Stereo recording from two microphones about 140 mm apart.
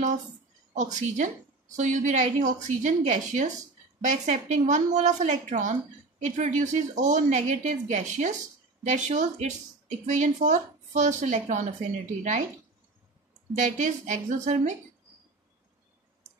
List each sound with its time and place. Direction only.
0.7 s a woman's voice: 60° right (ahead or behind)
13.6 s a woman's voice: 60° right (ahead or behind)